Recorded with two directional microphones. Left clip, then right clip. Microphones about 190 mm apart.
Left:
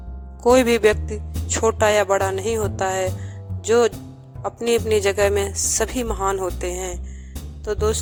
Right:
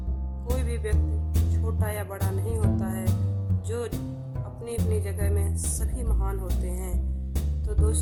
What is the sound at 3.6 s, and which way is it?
Speech, 40° left (ahead or behind).